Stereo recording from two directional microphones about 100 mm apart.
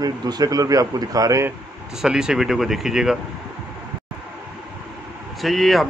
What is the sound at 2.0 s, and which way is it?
Speech, 5° right (ahead or behind).